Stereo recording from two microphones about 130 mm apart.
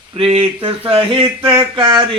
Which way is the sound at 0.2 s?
45° right (ahead or behind).